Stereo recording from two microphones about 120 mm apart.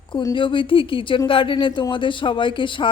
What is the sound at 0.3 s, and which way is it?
Speech, 45° left (ahead or behind).